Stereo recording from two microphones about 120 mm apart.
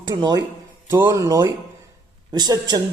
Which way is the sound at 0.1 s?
35° right (ahead or behind).